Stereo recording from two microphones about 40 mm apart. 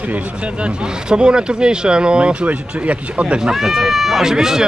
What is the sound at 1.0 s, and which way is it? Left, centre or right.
Speech, right.